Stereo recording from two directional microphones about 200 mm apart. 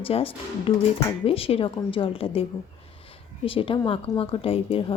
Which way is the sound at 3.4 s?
25° left (ahead or behind).